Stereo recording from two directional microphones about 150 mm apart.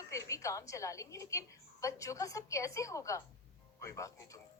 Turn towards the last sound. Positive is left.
turn(degrees=20)  # may be behind; listen again after turning